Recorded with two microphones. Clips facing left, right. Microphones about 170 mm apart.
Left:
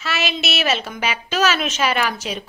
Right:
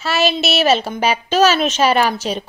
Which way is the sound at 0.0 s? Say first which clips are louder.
Right 7 dB; 30° right (ahead or behind).